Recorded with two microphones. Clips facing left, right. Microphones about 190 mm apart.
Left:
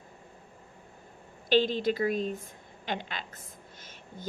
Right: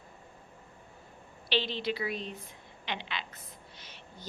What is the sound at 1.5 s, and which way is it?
A woman's voice, 45° left (ahead or behind).